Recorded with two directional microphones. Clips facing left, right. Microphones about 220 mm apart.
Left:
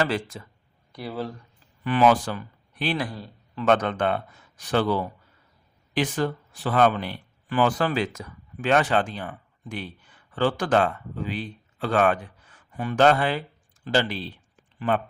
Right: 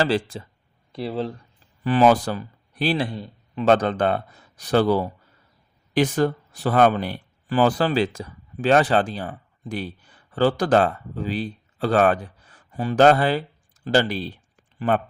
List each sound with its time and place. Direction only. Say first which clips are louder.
0.0 s a man's voice: right 4 dB; 30° right (ahead or behind)
3.7 s a man's voice: right 3 dB; 35° right (ahead or behind)